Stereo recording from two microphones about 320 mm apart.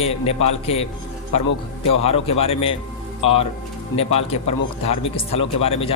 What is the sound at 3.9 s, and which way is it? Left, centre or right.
A man's voice, centre.